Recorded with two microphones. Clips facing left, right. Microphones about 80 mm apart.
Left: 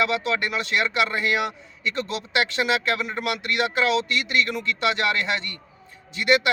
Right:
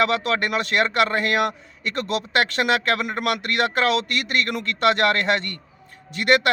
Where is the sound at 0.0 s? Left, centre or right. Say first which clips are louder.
Right 2 dB; right.